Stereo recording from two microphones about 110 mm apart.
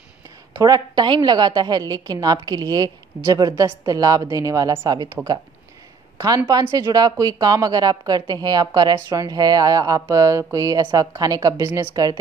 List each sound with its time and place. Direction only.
0.6 s a woman's voice: 35° right (ahead or behind)
6.1 s a woman's voice: 30° right (ahead or behind)